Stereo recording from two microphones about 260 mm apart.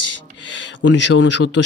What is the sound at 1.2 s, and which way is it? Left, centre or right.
Speech, left.